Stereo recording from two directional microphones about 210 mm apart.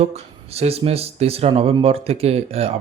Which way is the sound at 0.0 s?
30° right (ahead or behind).